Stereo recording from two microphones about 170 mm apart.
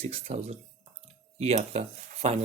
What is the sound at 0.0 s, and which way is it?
Speech, 40° right (ahead or behind).